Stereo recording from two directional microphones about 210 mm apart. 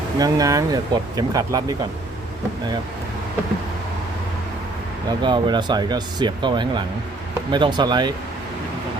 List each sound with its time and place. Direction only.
0.2 s speech: 15° right (ahead or behind)
5.0 s speech: 20° right (ahead or behind)